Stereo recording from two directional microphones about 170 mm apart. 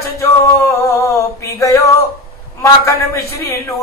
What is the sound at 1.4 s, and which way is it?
A man's voice, 20° left (ahead or behind).